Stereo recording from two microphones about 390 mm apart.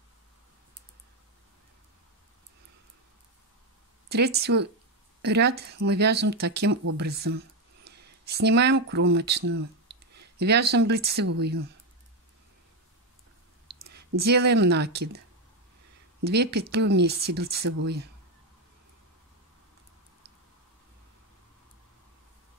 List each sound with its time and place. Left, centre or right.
4.1 s speech: right
7.0 s a sound: right
8.8 s speech: right
14.2 s speech: right
16.3 s speech: right